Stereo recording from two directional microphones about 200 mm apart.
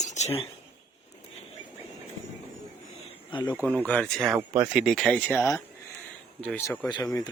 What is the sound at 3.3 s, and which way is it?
Speech, 25° left (ahead or behind).